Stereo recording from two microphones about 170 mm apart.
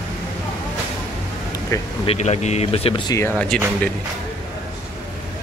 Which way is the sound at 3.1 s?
15° left (ahead or behind).